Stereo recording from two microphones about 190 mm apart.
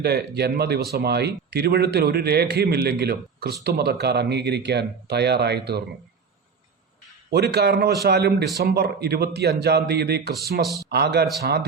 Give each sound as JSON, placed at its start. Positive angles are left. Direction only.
{"t": 0.0, "sound": "speech", "side_deg": -60}
{"t": 7.3, "sound": "speech", "side_deg": -60}